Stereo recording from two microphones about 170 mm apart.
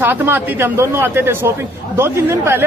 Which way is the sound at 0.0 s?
10° right (ahead or behind).